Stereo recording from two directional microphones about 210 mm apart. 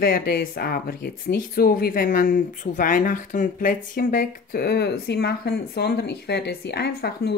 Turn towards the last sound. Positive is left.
turn(degrees=50)  # may be behind; listen again after turning